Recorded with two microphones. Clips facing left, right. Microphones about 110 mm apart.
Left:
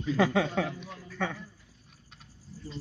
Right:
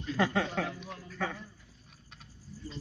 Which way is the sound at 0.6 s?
90° left.